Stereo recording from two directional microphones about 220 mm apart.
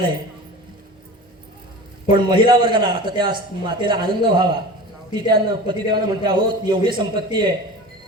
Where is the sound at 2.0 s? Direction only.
20° right (ahead or behind).